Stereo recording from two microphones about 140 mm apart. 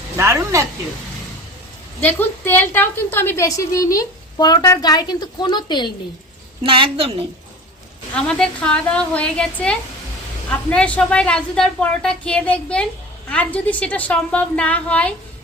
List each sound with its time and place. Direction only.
0.2 s speech: 20° right (ahead or behind)
2.0 s a woman's voice: 15° left (ahead or behind); by 5.9 s 30° left (ahead or behind)
6.6 s a woman's voice: 40° right (ahead or behind)
8.1 s speech: 5° left (ahead or behind)